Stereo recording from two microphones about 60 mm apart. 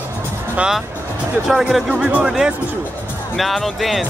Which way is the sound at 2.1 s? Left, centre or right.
Right.